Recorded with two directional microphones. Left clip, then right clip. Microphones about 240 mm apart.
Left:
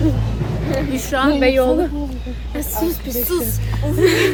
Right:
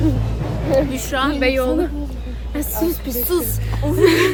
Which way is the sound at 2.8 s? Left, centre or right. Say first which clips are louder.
Right 1 dB; centre.